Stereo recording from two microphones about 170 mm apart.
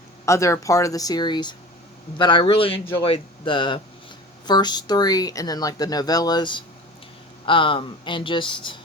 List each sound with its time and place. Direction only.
0.3 s a man's voice: 15° left (ahead or behind)